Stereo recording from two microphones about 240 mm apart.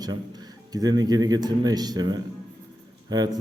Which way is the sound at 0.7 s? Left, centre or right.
Centre.